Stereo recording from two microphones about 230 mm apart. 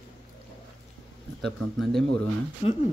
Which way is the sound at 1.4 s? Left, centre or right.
Centre.